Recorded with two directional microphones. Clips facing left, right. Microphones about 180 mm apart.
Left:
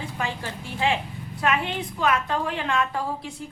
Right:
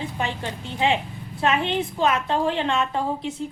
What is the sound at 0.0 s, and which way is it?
A woman's voice, 20° right (ahead or behind).